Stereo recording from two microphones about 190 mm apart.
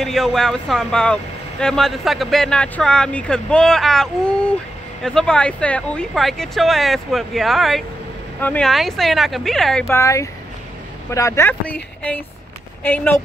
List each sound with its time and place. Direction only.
0.0 s speech: centre (ahead or behind)
9.8 s speech: 15° left (ahead or behind)